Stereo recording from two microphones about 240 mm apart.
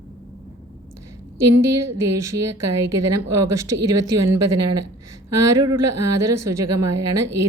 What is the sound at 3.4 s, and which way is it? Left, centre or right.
Speech, centre.